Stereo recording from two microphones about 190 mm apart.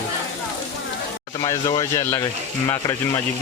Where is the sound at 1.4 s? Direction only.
20° left (ahead or behind).